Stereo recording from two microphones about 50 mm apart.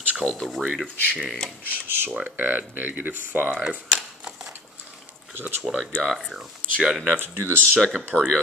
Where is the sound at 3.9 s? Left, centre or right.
Centre.